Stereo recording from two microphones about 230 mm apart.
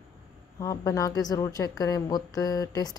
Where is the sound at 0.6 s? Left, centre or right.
Centre.